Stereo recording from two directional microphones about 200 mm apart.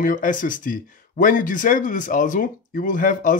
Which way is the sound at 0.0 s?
40° left (ahead or behind).